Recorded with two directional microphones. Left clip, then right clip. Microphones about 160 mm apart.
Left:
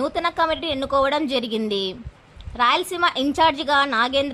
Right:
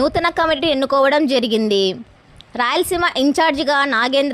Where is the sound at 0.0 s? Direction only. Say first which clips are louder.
Right 5 dB; 35° right (ahead or behind).